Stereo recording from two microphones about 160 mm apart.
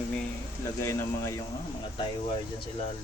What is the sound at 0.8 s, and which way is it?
Speech, 15° left (ahead or behind).